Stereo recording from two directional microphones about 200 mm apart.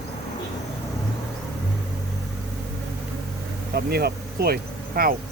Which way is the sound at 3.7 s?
50° right (ahead or behind).